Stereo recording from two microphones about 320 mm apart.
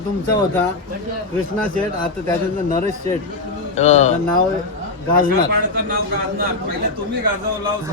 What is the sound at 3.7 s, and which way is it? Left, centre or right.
Speech, left.